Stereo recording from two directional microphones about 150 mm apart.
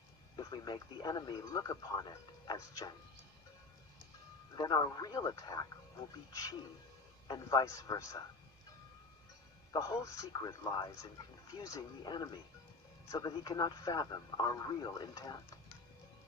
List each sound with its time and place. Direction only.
0.3 s speech: 30° left (ahead or behind)
4.5 s speech: 25° left (ahead or behind)
9.7 s speech: 20° left (ahead or behind)